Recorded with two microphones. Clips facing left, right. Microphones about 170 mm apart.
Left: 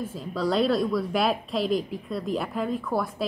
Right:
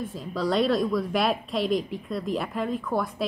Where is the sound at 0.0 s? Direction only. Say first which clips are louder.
Left 1 dB; centre (ahead or behind).